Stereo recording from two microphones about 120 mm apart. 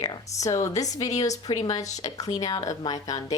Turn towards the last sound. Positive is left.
turn(degrees=30)  # may be behind; listen again after turning